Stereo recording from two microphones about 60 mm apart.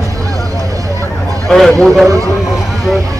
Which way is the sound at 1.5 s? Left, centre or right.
Centre.